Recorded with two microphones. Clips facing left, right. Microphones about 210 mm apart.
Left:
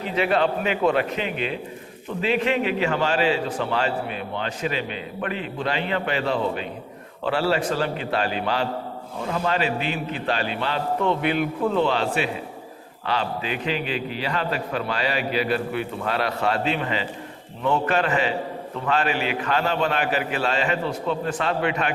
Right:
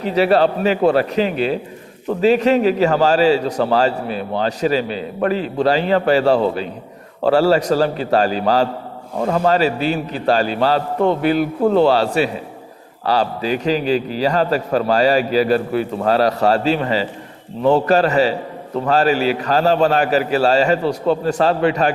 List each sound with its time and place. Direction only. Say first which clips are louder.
0.1 s a man's voice: right 7 dB; 35° right (ahead or behind)